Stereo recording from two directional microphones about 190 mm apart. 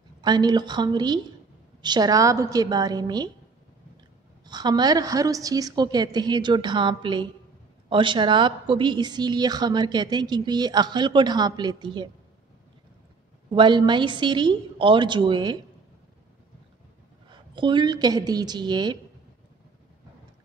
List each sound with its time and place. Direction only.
0.2 s a woman's voice: 20° right (ahead or behind)
4.5 s a woman's voice: 20° right (ahead or behind)
13.5 s a woman's voice: 25° right (ahead or behind)
17.3 s a woman's voice: 25° right (ahead or behind)